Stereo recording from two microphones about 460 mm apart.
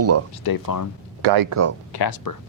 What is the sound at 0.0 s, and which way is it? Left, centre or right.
Speech, right.